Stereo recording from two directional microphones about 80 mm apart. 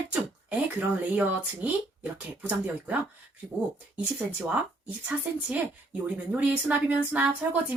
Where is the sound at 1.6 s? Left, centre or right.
Centre.